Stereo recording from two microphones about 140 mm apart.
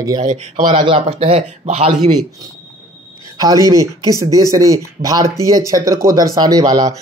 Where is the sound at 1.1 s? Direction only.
40° right (ahead or behind).